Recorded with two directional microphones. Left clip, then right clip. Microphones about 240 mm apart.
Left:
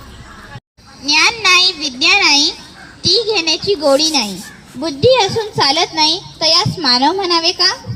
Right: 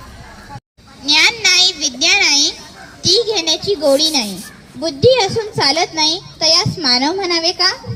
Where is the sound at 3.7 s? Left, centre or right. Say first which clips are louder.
Left 1 dB; centre.